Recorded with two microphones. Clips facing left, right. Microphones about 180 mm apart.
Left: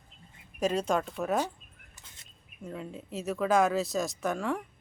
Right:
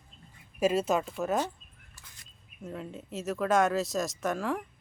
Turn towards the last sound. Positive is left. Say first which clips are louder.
# even
turn(degrees=0)  # may be behind; listen again after turning